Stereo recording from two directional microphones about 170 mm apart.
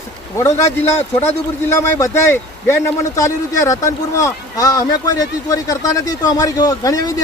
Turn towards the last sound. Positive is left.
turn(degrees=20)  # may be behind; listen again after turning